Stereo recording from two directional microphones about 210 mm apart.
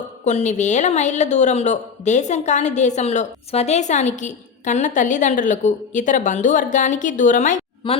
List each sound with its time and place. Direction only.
0.3 s a woman's voice: 35° left (ahead or behind)